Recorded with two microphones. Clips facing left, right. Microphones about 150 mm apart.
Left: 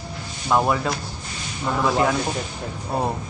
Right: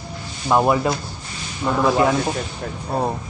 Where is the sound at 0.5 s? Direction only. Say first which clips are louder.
Right 3 dB; 10° right (ahead or behind).